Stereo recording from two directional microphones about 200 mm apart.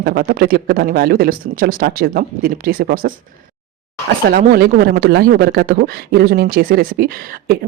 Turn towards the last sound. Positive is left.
turn(degrees=-45)  # may be behind; listen again after turning